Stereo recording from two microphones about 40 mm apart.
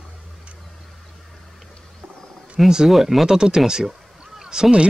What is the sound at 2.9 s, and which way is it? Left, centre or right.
Speech, centre.